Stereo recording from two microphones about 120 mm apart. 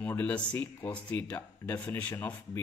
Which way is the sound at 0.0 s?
15° left (ahead or behind).